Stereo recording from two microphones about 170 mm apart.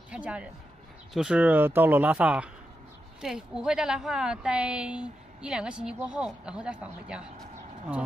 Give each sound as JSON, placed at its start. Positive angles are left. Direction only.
{"t": 0.1, "sound": "a woman's voice", "side_deg": -5}